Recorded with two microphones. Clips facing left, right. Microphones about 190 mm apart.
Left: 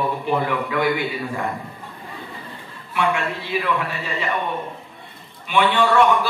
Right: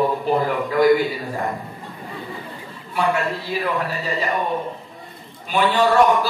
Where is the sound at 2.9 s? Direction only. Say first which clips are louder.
Right 1 dB; 40° right (ahead or behind).